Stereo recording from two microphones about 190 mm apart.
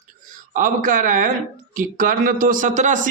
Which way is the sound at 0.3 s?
45° right (ahead or behind).